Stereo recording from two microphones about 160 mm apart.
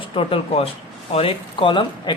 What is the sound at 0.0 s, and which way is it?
A woman's voice, 35° left (ahead or behind).